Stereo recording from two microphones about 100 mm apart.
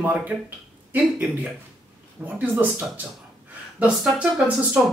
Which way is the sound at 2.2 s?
15° right (ahead or behind).